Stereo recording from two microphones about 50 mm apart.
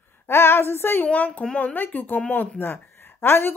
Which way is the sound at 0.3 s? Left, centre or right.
Left.